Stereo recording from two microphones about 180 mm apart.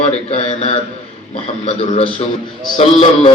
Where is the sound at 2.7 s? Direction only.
35° left (ahead or behind).